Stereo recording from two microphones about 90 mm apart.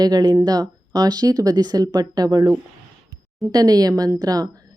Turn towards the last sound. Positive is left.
turn(degrees=-45)  # may be behind; listen again after turning